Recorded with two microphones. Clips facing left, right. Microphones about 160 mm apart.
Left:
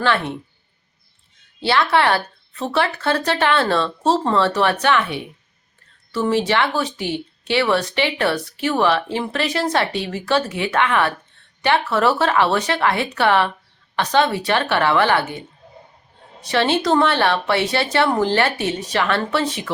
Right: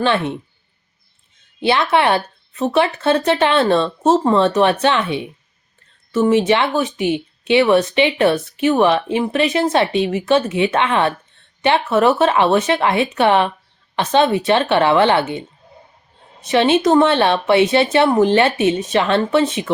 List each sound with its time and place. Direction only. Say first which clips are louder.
0.0 s speech: right 3 dB; 20° right (ahead or behind)
1.6 s speech: right 2 dB; 20° right (ahead or behind)